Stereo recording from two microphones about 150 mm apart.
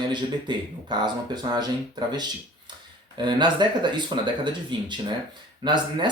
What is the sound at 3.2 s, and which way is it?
Speech, 30° right (ahead or behind).